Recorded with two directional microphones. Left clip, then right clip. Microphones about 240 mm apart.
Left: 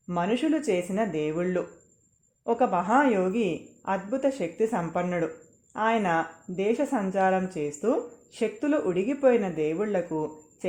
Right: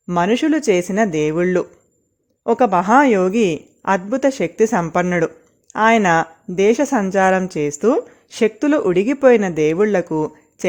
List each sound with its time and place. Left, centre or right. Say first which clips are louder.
0.1 s speech: right 10 dB; right